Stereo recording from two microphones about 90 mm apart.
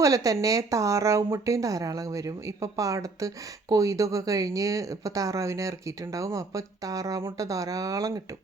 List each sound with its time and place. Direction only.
0.0 s speech: 40° right (ahead or behind)